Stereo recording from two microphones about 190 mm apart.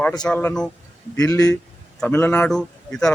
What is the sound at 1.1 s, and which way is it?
A man's voice, 20° left (ahead or behind).